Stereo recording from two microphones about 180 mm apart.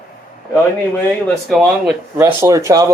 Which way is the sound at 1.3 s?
Centre (ahead or behind).